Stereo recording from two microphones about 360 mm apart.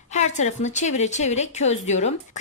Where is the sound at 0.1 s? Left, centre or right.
Centre.